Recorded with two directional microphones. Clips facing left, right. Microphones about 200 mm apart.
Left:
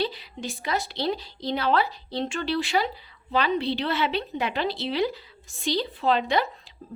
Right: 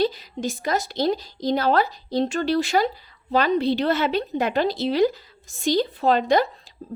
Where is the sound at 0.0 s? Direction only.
45° right (ahead or behind).